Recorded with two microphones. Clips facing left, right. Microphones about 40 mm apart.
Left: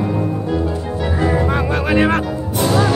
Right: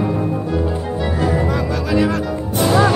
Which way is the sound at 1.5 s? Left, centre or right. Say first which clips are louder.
Left 2 dB; left.